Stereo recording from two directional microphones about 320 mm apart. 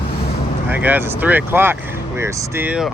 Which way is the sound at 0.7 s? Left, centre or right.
Centre.